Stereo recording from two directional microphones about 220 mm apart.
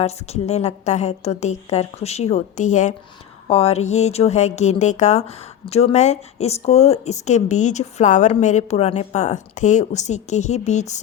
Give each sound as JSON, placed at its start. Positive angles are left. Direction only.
{"t": 0.0, "sound": "a woman's voice", "side_deg": 30}